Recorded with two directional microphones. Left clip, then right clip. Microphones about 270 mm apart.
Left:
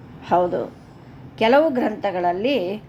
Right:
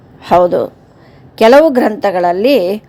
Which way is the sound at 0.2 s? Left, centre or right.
Right.